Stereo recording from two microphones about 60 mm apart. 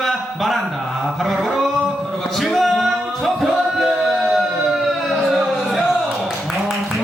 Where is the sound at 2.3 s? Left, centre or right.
Centre.